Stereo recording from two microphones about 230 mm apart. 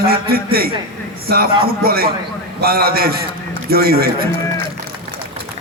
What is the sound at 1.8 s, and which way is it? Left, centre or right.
A man's voice, right.